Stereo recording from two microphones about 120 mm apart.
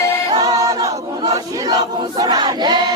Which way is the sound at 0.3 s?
30° right (ahead or behind).